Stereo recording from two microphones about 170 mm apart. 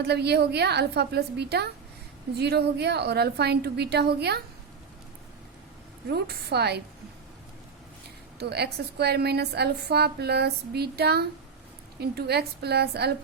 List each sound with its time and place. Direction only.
0.0 s a woman's voice: 75° right (ahead or behind)
6.1 s a woman's voice: 70° right (ahead or behind)
8.4 s a woman's voice: 75° right (ahead or behind)